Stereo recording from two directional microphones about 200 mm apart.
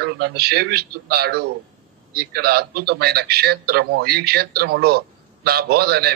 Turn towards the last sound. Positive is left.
turn(degrees=-50)  # may be behind; listen again after turning